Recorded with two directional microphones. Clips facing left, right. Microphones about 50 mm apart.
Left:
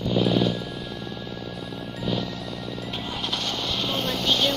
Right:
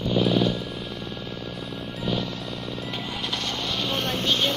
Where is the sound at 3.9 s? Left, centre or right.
Right.